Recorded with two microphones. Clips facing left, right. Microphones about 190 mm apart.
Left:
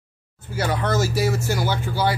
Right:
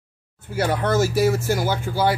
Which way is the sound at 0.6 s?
55° right (ahead or behind).